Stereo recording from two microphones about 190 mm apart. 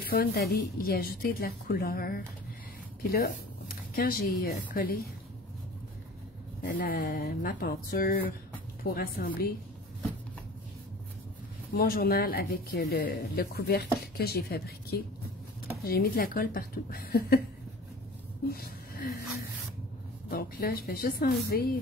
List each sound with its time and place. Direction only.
0.0 s speech: 50° left (ahead or behind)
3.0 s a sound: 50° left (ahead or behind)
4.4 s speech: 50° left (ahead or behind)
6.6 s speech: 50° left (ahead or behind)
11.7 s speech: 50° left (ahead or behind)
18.5 s a sound: 55° left (ahead or behind)
20.2 s speech: 55° left (ahead or behind)